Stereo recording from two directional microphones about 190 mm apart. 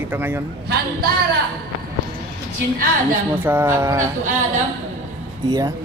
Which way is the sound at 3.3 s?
10° right (ahead or behind).